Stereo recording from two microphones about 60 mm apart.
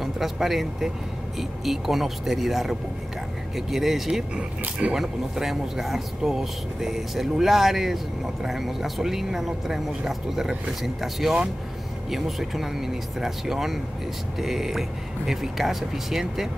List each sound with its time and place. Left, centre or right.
0.0 s speech: centre
4.4 s speech: centre
4.9 s speech: centre